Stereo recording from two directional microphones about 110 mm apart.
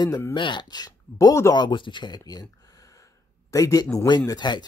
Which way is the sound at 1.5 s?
45° left (ahead or behind).